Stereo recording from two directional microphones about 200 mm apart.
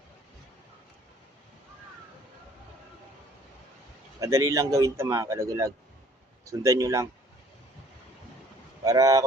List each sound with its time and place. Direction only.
4.2 s a man's voice: 15° right (ahead or behind)
8.8 s speech: 15° right (ahead or behind)